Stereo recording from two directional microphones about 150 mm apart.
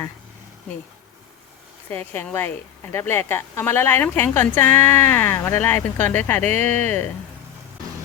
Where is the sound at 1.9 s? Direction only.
15° left (ahead or behind).